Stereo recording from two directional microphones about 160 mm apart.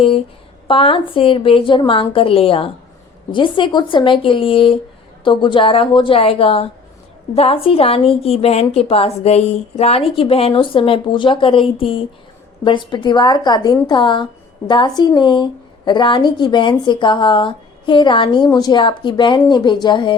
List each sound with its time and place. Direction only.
0.7 s a woman's voice: 35° left (ahead or behind)